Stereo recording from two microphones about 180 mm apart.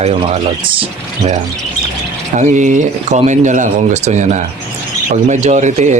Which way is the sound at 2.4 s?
45° right (ahead or behind).